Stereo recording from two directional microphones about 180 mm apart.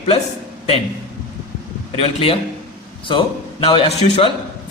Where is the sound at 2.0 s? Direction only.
30° left (ahead or behind).